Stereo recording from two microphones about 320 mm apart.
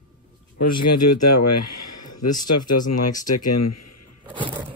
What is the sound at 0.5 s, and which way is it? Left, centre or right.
Speech, left.